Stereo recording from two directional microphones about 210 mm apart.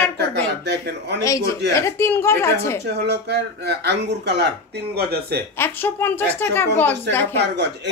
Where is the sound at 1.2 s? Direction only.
15° left (ahead or behind).